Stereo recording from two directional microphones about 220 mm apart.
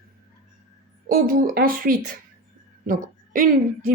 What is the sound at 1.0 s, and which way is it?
Speech, 40° right (ahead or behind).